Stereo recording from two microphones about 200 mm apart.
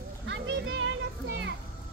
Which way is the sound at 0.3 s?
60° right (ahead or behind).